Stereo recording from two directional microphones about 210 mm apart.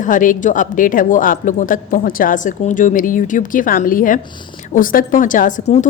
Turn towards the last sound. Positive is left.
turn(degrees=35)  # may be behind; listen again after turning